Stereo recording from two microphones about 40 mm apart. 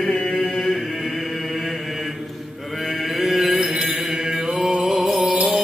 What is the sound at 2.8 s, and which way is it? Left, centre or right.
Music, centre.